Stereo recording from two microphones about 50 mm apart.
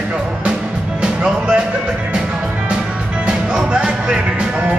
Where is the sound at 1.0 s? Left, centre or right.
Centre.